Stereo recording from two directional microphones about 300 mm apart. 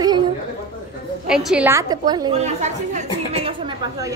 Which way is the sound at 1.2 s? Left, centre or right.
Centre.